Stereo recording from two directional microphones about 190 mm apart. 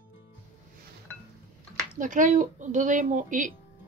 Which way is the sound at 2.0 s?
45° right (ahead or behind).